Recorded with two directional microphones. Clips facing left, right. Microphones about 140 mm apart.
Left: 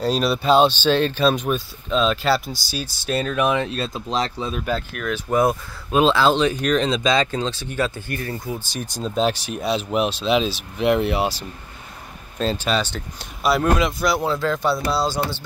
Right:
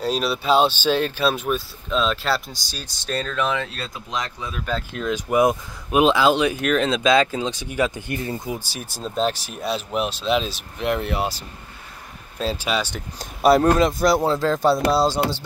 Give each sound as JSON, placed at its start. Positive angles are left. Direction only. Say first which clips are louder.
{"t": 0.0, "sound": "speech", "louder": "left 3 dB", "side_deg": -5}
{"t": 4.9, "sound": "speech", "louder": "right 2 dB", "side_deg": -20}
{"t": 8.7, "sound": "speech", "louder": "left 5 dB", "side_deg": -5}
{"t": 12.4, "sound": "speech", "louder": "left 2 dB", "side_deg": -10}
{"t": 13.2, "sound": "speech", "louder": "right 5 dB", "side_deg": -45}